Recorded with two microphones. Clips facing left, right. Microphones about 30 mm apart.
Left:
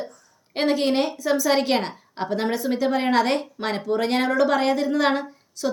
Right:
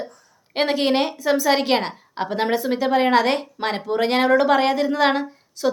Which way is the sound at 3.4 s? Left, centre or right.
Right.